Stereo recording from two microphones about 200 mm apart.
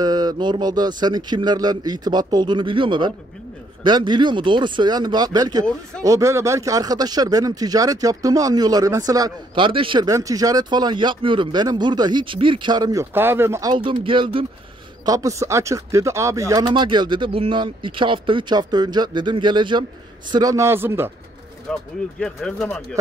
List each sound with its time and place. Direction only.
0.0 s speech: 20° right (ahead or behind)
21.7 s speech: centre (ahead or behind)